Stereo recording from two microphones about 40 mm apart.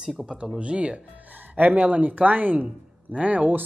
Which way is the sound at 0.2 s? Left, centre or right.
Centre.